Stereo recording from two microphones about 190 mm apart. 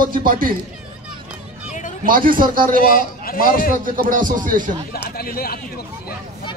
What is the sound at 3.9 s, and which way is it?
Speech, 45° right (ahead or behind).